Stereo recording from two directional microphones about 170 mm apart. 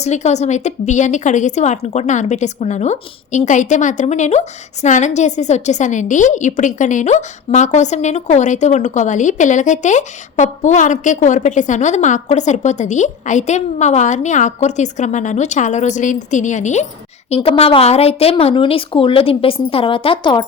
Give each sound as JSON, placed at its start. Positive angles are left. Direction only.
{"t": 0.0, "sound": "a woman's voice", "side_deg": 40}